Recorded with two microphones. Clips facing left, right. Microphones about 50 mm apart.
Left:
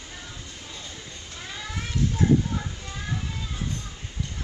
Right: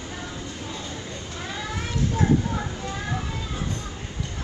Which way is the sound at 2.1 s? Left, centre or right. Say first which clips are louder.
Even; right.